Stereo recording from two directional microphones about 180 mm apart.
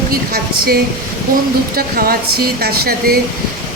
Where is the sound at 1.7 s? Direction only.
55° right (ahead or behind).